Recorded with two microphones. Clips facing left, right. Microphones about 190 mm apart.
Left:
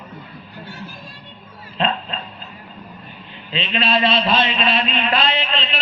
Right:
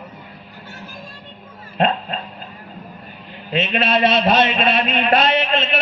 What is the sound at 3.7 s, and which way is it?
A man's voice, 55° right (ahead or behind).